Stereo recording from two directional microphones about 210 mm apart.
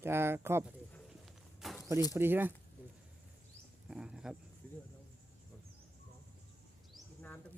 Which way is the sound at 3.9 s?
5° right (ahead or behind).